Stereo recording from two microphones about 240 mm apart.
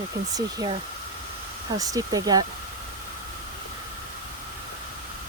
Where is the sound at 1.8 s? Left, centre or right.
Centre.